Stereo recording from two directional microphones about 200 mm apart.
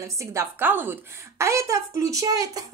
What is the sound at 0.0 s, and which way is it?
A woman's voice, 15° right (ahead or behind).